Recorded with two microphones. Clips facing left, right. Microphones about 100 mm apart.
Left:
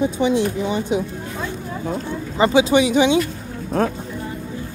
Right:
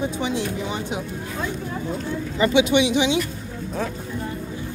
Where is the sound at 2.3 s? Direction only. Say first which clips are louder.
Left 3 dB; 30° left (ahead or behind).